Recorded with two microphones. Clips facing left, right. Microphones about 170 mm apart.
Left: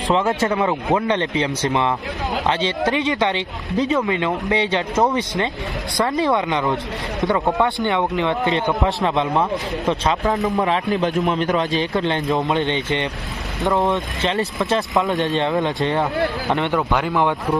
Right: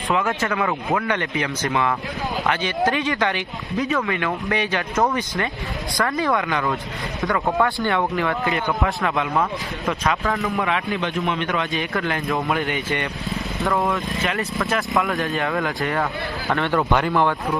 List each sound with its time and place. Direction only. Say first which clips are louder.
0.1 s a man's voice: left 4 dB; 30° left (ahead or behind)
16.7 s speech: even; 5° left (ahead or behind)